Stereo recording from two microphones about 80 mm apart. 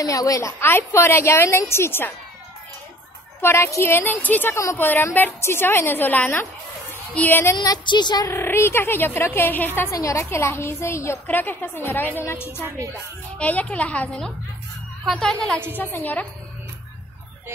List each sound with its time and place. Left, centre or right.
0.0 s a woman's voice: left
0.6 s speech: left
3.3 s a woman's voice: left
7.8 s speech: left
8.3 s a woman's voice: left
9.8 s speech: left
11.2 s a woman's voice: left
13.4 s a woman's voice: centre
15.2 s a woman's voice: centre
15.8 s a woman's voice: left